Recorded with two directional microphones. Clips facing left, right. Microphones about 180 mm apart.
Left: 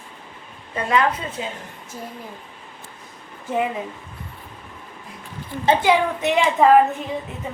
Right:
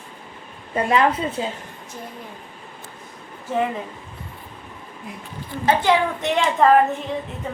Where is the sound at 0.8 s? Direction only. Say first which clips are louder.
Right 2 dB; 30° right (ahead or behind).